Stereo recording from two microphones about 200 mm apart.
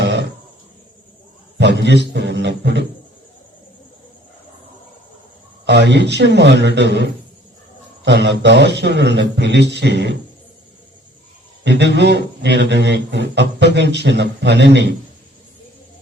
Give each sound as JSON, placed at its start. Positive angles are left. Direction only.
{"t": 0.0, "sound": "a sound", "side_deg": -60}
{"t": 1.5, "sound": "a man's voice", "side_deg": -60}
{"t": 5.6, "sound": "a man's voice", "side_deg": -60}
{"t": 11.6, "sound": "a man's voice", "side_deg": -60}